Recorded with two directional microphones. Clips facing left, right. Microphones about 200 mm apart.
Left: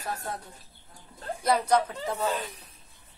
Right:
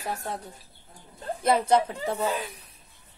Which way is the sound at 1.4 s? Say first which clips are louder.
Right 2 dB; 25° right (ahead or behind).